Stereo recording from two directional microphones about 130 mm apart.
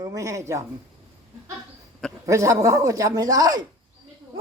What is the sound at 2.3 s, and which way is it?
Speech, 25° right (ahead or behind).